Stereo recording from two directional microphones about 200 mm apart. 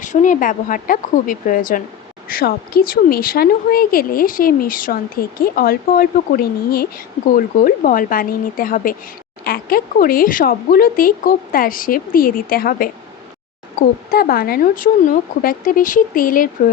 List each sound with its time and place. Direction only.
0.0 s speech: 40° left (ahead or behind)